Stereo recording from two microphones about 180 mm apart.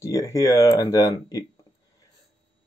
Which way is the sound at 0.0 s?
20° left (ahead or behind).